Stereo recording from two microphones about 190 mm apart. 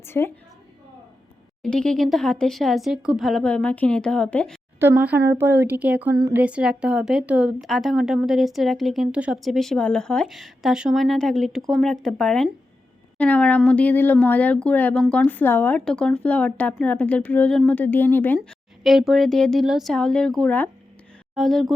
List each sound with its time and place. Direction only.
0.0 s a woman's voice: 10° left (ahead or behind)
1.6 s a woman's voice: 5° left (ahead or behind)
4.8 s a woman's voice: 10° right (ahead or behind); by 18.3 s 10° left (ahead or behind)
18.3 s a woman's voice: centre (ahead or behind)